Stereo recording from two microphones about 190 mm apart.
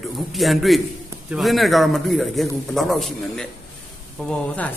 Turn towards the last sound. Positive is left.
turn(degrees=5)  # may be behind; listen again after turning